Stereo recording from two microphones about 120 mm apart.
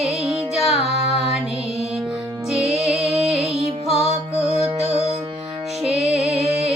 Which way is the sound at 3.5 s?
60° right (ahead or behind).